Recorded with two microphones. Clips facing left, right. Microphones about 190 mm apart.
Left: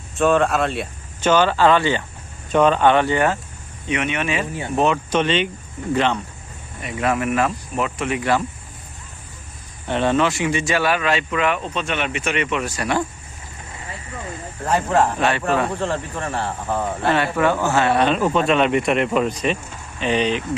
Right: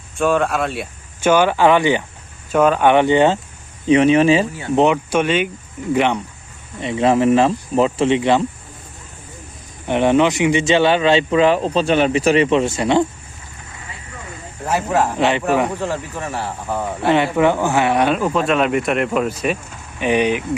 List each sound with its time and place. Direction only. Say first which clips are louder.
0.2 s speech: even; centre (ahead or behind)
2.9 s speech: right 5 dB; 20° right (ahead or behind)
3.8 s speech: right 11 dB; 30° right (ahead or behind)
4.7 s speech: right 4 dB; 15° right (ahead or behind)
6.7 s speech: right 6 dB; 25° right (ahead or behind)
9.8 s speech: right 4 dB; 15° right (ahead or behind)
14.6 s speech: even; 10° right (ahead or behind)